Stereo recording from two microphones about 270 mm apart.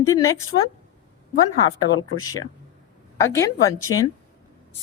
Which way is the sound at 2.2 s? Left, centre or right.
Centre.